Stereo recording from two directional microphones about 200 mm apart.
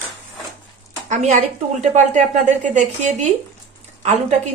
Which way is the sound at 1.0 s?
35° right (ahead or behind).